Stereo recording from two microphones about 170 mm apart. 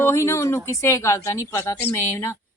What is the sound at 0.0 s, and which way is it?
Speech, 15° left (ahead or behind).